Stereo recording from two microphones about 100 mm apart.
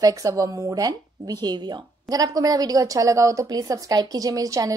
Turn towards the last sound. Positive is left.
turn(degrees=-35)  # may be behind; listen again after turning